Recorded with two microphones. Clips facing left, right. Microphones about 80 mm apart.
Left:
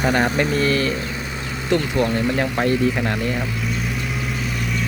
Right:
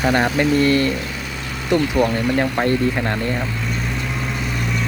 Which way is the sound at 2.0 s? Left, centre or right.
Right.